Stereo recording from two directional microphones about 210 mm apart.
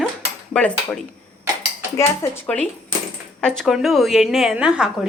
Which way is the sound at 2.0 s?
10° left (ahead or behind).